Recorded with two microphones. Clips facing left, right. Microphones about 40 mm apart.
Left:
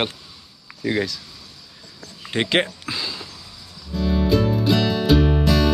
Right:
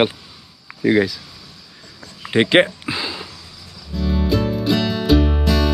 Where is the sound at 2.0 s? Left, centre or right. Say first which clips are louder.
Right 7 dB; centre.